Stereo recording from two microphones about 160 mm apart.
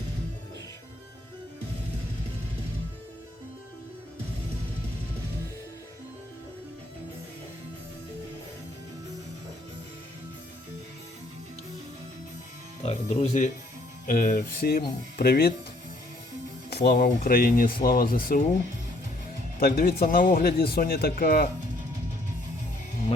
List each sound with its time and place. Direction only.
12.8 s speech: 40° left (ahead or behind)
14.1 s speech: 60° left (ahead or behind); by 15.5 s 75° left (ahead or behind)
16.6 s speech: 90° left
17.2 s speech: 65° left (ahead or behind)
19.5 s speech: 70° left (ahead or behind)